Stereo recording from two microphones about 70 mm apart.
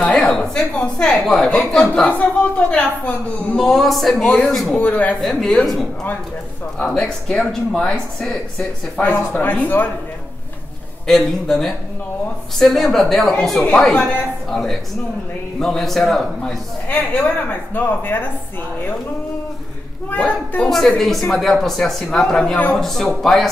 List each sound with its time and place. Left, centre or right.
0.1 s a woman's voice: centre
3.5 s speech: centre
4.7 s speech: left
5.2 s speech: centre
7.0 s a woman's voice: centre
9.0 s speech: left
11.1 s a woman's voice: centre
16.9 s speech: left
20.1 s speech: left
20.6 s speech: centre